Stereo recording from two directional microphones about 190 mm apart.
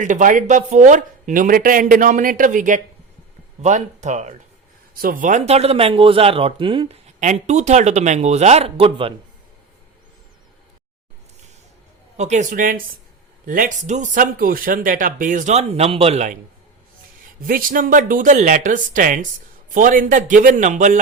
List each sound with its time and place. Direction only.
0.0 s a man's voice: 40° right (ahead or behind)
12.1 s speech: 35° right (ahead or behind)
17.4 s speech: 45° right (ahead or behind)